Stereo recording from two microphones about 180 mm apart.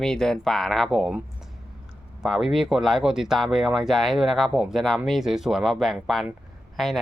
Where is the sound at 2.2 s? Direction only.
Centre (ahead or behind).